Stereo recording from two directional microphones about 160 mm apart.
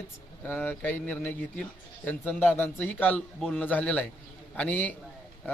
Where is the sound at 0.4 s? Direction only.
10° left (ahead or behind).